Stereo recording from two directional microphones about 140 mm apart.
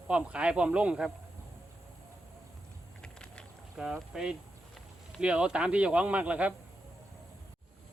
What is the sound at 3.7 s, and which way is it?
Speech, 5° right (ahead or behind).